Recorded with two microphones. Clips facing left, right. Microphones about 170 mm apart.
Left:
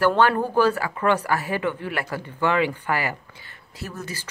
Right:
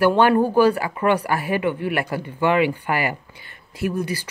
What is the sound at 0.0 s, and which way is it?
Speech, 15° right (ahead or behind).